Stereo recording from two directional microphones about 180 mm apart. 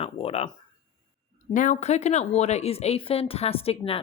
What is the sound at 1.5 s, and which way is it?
Speech, 45° left (ahead or behind).